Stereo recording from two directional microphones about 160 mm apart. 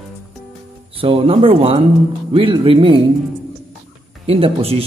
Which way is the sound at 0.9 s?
35° right (ahead or behind).